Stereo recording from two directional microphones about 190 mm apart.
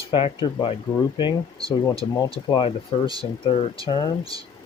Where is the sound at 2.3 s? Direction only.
25° left (ahead or behind).